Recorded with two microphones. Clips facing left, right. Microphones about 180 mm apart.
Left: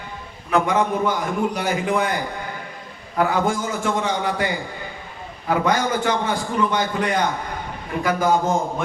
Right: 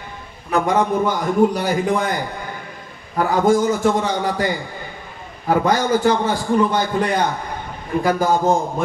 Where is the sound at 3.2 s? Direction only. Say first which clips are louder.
Right 5 dB; 40° right (ahead or behind).